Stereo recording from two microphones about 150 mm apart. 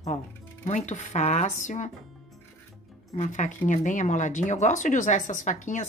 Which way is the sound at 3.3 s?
55° left (ahead or behind).